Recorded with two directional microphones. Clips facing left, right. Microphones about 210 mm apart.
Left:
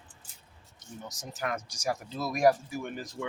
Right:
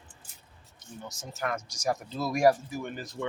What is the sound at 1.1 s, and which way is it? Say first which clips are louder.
A man's voice: right 1 dB; 15° left (ahead or behind).